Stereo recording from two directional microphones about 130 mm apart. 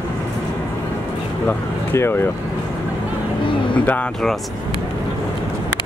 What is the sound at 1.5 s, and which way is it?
Speech, 20° left (ahead or behind).